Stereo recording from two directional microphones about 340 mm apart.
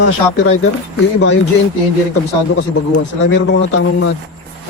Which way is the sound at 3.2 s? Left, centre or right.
Left.